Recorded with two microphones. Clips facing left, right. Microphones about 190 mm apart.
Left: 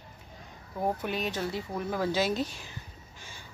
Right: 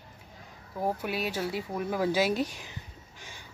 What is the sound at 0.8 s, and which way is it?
Speech, 5° right (ahead or behind).